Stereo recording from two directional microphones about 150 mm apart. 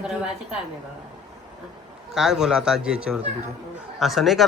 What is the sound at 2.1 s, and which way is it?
Speech, 5° right (ahead or behind).